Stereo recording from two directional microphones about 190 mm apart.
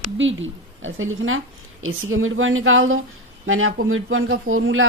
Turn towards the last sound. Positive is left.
turn(degrees=-90)